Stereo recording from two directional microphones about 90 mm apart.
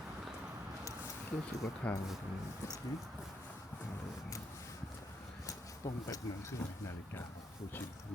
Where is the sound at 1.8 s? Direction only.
15° left (ahead or behind).